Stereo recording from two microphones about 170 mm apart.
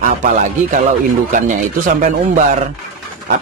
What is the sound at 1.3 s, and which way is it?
Speech, 50° right (ahead or behind).